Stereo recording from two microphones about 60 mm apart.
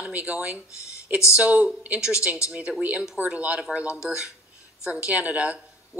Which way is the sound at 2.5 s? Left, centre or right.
Centre.